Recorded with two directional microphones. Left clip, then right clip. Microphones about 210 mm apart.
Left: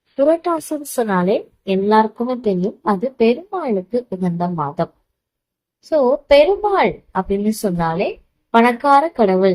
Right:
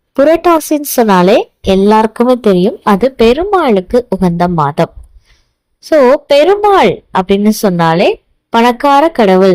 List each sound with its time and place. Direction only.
0.4 s a woman's voice: 45° right (ahead or behind)
5.9 s a woman's voice: 40° right (ahead or behind)